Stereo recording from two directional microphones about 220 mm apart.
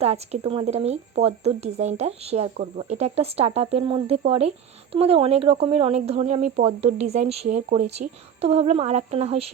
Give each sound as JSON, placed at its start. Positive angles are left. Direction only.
{"t": 0.0, "sound": "speech", "side_deg": -30}